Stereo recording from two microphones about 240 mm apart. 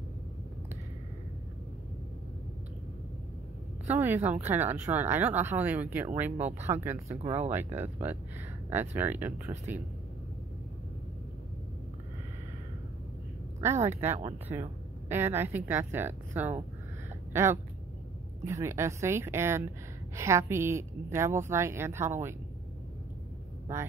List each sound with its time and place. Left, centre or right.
3.8 s speech: centre
7.2 s speech: right
7.4 s speech: centre
13.6 s speech: centre